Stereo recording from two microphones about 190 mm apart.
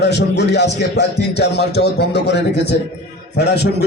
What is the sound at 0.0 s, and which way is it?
A man's voice, 60° left (ahead or behind).